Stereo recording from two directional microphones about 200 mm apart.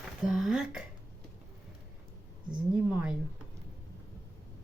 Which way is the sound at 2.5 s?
5° right (ahead or behind).